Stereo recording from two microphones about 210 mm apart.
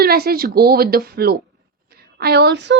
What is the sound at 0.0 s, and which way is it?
Speech, 45° right (ahead or behind).